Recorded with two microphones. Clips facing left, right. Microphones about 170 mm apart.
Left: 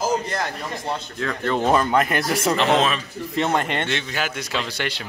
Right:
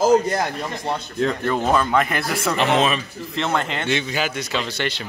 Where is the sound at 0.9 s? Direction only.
15° right (ahead or behind).